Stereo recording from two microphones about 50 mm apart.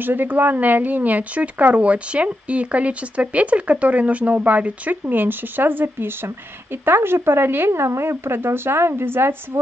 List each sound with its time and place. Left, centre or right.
0.0 s a woman's voice: right